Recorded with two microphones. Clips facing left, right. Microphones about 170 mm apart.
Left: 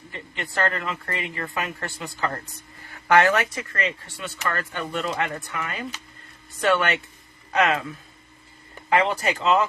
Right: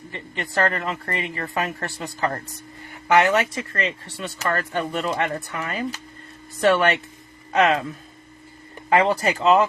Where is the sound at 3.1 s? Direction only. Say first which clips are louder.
Right 1 dB; 20° right (ahead or behind).